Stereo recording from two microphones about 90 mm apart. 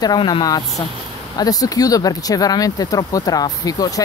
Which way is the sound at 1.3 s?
45° left (ahead or behind).